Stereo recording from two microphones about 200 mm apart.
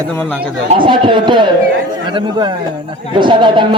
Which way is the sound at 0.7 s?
25° right (ahead or behind).